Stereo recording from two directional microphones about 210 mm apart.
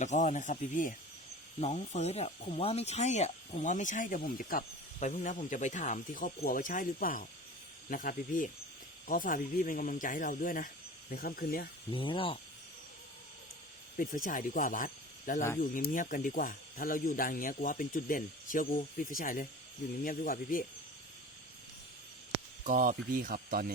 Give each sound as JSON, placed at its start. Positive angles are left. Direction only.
{"t": 0.0, "sound": "speech", "side_deg": 35}
{"t": 11.9, "sound": "speech", "side_deg": 25}
{"t": 13.9, "sound": "speech", "side_deg": 40}
{"t": 22.6, "sound": "speech", "side_deg": -40}